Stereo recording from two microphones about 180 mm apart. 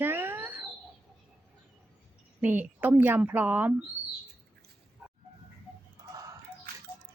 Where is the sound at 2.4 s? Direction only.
10° right (ahead or behind).